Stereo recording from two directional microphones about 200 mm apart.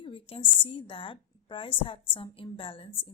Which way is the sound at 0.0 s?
25° left (ahead or behind).